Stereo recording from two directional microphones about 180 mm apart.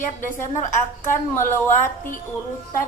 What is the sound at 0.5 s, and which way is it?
A woman's voice, 45° left (ahead or behind).